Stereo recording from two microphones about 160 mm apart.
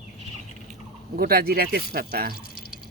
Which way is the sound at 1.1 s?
70° right (ahead or behind).